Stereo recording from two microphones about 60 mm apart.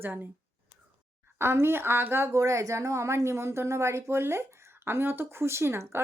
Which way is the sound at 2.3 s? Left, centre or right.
Right.